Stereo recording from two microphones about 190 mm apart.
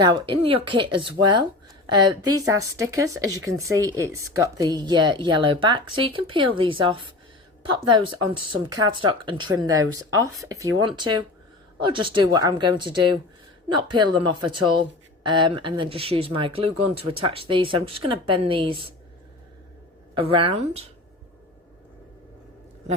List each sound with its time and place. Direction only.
0.0 s speech: 25° right (ahead or behind)
20.1 s speech: 25° right (ahead or behind)